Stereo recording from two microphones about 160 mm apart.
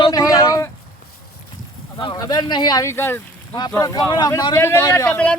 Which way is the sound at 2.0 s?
25° left (ahead or behind).